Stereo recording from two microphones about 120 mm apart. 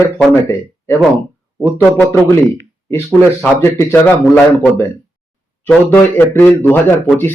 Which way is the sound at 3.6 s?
20° left (ahead or behind).